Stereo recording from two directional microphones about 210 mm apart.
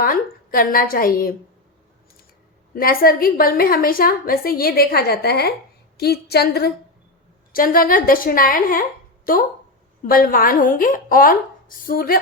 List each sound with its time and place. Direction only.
0.0 s a woman's voice: 45° left (ahead or behind)
2.7 s a woman's voice: 45° left (ahead or behind)